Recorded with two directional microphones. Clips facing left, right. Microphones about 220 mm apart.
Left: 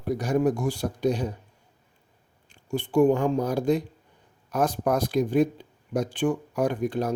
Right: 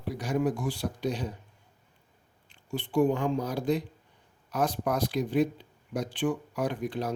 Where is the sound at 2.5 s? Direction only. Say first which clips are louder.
Left 5 dB; 45° left (ahead or behind).